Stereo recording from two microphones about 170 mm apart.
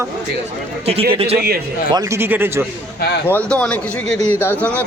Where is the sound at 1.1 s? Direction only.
35° right (ahead or behind).